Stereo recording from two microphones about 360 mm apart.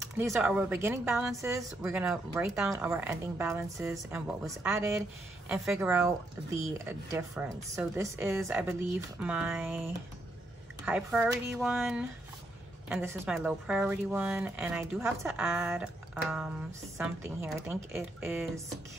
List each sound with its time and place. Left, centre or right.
0.2 s a woman's voice: centre
10.9 s a woman's voice: centre